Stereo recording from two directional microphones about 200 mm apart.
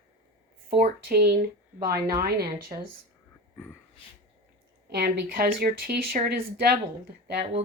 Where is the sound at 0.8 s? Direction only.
50° right (ahead or behind).